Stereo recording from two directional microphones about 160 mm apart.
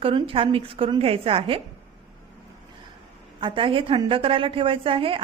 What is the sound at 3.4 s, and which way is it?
A woman's voice, 30° right (ahead or behind).